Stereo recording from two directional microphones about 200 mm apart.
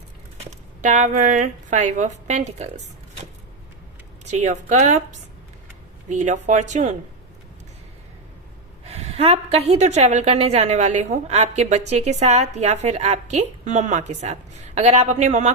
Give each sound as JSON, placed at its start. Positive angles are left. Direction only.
{"t": 0.8, "sound": "a woman's voice", "side_deg": -40}
{"t": 4.3, "sound": "a woman's voice", "side_deg": -35}
{"t": 6.1, "sound": "a woman's voice", "side_deg": -35}
{"t": 8.8, "sound": "a woman's voice", "side_deg": -30}